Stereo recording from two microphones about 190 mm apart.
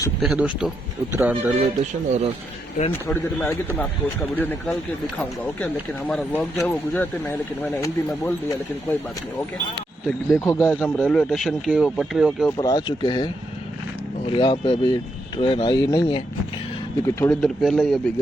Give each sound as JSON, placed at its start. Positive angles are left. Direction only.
{"t": 0.2, "sound": "speech", "side_deg": -5}
{"t": 2.0, "sound": "speech", "side_deg": -35}
{"t": 3.1, "sound": "speech", "side_deg": 10}
{"t": 5.5, "sound": "speech", "side_deg": 10}
{"t": 10.1, "sound": "speech", "side_deg": 5}
{"t": 10.4, "sound": "speech", "side_deg": 15}
{"t": 12.5, "sound": "speech", "side_deg": 20}
{"t": 17.1, "sound": "speech", "side_deg": 10}